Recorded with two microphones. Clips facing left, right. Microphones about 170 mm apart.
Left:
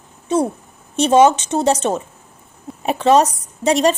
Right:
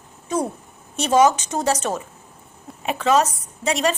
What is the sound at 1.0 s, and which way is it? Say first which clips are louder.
Speech: left 4 dB; 30° left (ahead or behind).